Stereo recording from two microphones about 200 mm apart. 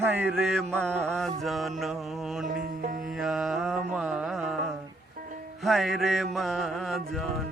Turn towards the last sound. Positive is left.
turn(degrees=0)  # may be behind; listen again after turning